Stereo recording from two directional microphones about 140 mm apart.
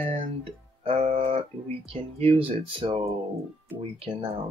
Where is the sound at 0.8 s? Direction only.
45° right (ahead or behind).